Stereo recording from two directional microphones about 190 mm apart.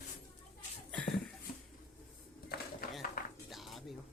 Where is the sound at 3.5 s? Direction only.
Centre (ahead or behind).